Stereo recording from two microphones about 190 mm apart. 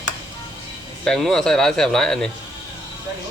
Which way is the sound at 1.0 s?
Centre (ahead or behind).